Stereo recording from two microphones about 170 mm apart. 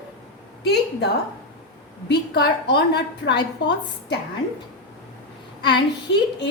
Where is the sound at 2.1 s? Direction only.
75° left (ahead or behind).